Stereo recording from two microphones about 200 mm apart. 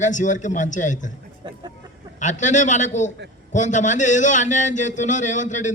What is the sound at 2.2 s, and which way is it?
A man's voice, 35° left (ahead or behind).